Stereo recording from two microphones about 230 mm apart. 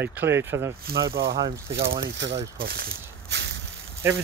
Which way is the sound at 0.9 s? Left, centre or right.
Right.